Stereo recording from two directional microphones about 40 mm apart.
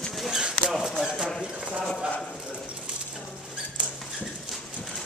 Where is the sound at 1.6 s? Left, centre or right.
Right.